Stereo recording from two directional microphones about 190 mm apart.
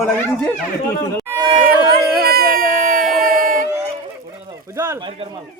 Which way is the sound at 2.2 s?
50° right (ahead or behind).